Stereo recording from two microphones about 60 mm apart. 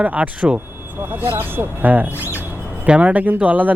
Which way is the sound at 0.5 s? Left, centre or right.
Right.